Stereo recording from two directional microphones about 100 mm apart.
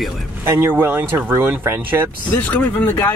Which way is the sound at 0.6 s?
20° right (ahead or behind).